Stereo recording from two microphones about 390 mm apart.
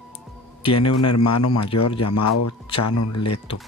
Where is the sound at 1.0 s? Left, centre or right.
Left.